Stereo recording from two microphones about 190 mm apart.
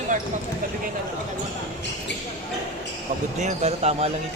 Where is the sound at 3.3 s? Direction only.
35° right (ahead or behind).